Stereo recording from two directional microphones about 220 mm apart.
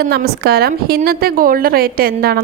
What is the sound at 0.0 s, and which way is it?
A woman's voice, 45° right (ahead or behind).